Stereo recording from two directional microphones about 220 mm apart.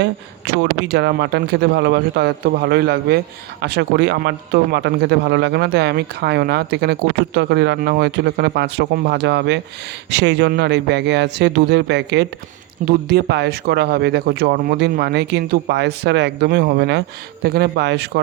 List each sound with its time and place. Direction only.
0.0 s speech: 50° right (ahead or behind)